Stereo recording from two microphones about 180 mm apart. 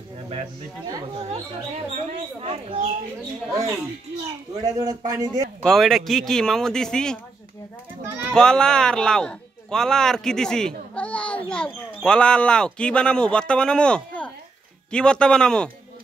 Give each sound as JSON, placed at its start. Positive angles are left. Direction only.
{"t": 2.4, "sound": "speech", "side_deg": -35}
{"t": 4.6, "sound": "a man's voice", "side_deg": -20}
{"t": 5.6, "sound": "a man's voice", "side_deg": 0}
{"t": 8.3, "sound": "a man's voice", "side_deg": 5}